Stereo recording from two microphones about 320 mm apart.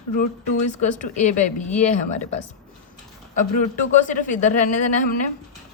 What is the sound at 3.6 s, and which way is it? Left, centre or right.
A woman's voice, left.